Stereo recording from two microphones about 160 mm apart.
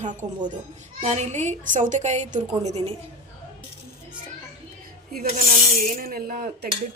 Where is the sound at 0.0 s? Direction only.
50° right (ahead or behind).